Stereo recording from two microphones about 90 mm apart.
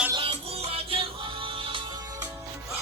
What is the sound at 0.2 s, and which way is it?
Music, 90° right.